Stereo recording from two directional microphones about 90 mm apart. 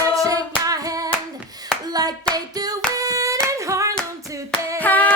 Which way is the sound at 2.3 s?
45° right (ahead or behind).